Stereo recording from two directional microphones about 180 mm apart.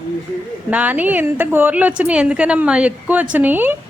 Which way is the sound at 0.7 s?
10° right (ahead or behind).